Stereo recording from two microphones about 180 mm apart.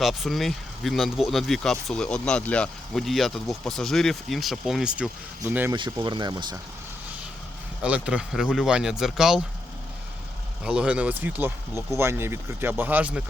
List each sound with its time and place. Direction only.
0.0 s speech: centre (ahead or behind)
5.7 s speech: 25° right (ahead or behind)
7.8 s speech: 5° right (ahead or behind)
10.6 s speech: 5° right (ahead or behind)